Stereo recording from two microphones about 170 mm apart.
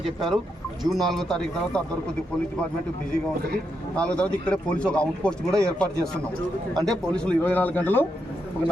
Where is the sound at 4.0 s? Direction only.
5° left (ahead or behind).